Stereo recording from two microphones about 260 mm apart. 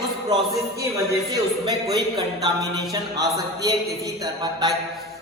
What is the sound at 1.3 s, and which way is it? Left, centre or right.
Mantra, centre.